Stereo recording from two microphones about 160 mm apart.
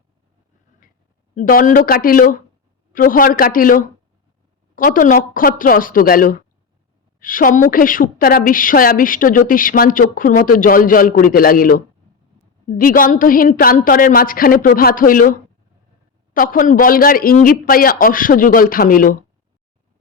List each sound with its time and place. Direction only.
1.4 s a woman's voice: 55° left (ahead or behind)